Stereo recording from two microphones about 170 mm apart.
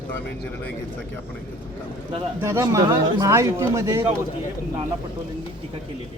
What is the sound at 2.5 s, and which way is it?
Speech, 20° right (ahead or behind).